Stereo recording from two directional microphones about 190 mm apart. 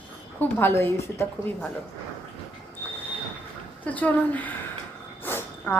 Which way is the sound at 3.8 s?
10° left (ahead or behind).